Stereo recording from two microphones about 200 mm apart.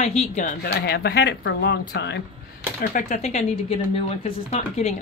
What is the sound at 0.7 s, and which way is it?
A man's voice, 55° left (ahead or behind).